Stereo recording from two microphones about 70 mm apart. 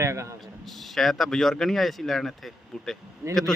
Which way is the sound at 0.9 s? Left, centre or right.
Centre.